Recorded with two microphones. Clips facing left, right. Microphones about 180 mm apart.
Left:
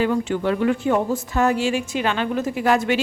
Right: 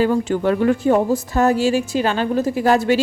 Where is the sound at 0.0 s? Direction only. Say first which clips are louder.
Right 3 dB; 40° right (ahead or behind).